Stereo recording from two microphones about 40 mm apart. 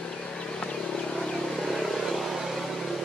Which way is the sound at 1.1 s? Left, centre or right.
Centre.